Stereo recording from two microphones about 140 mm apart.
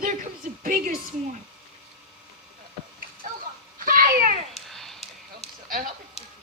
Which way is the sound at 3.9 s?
90° right.